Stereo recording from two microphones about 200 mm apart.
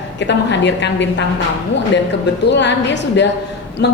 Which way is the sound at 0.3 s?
60° left (ahead or behind).